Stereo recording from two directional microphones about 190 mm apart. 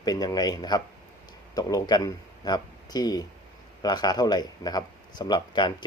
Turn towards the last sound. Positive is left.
turn(degrees=25)  # may be behind; listen again after turning